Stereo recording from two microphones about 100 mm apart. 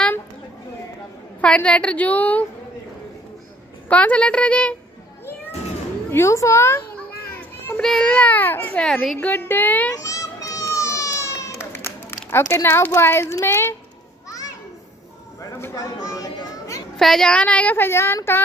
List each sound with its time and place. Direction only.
1.4 s speech: 10° left (ahead or behind)
3.9 s speech: 15° left (ahead or behind)
6.0 s a woman's voice: 25° left (ahead or behind)
7.3 s children playing: 20° left (ahead or behind)
7.8 s speech: 5° left (ahead or behind); by 8.8 s 20° left (ahead or behind)
8.8 s a child's voice: 5° left (ahead or behind)
9.2 s a woman's voice: 20° left (ahead or behind)
9.9 s a sound: 35° left (ahead or behind)
12.3 s a woman's voice: 25° left (ahead or behind)
15.7 s speech: 35° left (ahead or behind)
16.9 s speech: 5° left (ahead or behind); by 18.4 s 25° left (ahead or behind)